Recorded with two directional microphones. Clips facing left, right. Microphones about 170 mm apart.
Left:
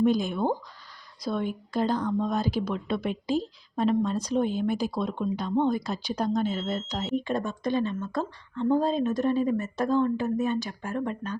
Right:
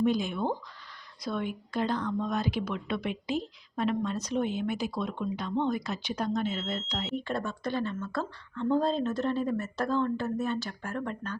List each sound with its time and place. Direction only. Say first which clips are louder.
0.0 s a woman's voice: left 4 dB; 40° left (ahead or behind)
7.1 s speech: left 5 dB; 15° left (ahead or behind)